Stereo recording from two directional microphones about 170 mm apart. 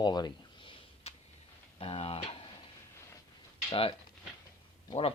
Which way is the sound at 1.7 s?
35° left (ahead or behind).